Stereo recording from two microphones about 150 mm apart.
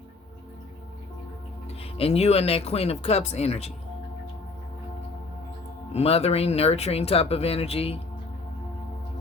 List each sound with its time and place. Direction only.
1.8 s speech: 40° left (ahead or behind)
5.9 s speech: 40° left (ahead or behind)